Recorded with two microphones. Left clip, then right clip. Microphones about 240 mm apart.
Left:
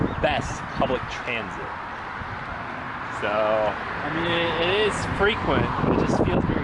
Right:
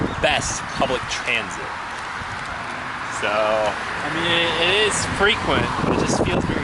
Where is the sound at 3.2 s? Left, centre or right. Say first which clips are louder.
Right 2 dB; centre.